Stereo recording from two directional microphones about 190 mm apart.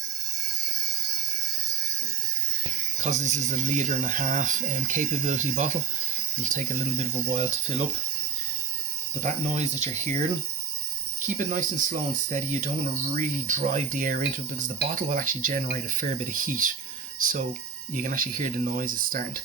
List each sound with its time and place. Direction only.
3.0 s speech: 35° right (ahead or behind)
9.2 s speech: 40° right (ahead or behind)
11.2 s speech: 40° right (ahead or behind)